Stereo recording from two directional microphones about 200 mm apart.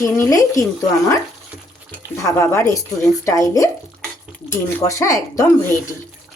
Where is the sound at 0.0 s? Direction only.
15° left (ahead or behind).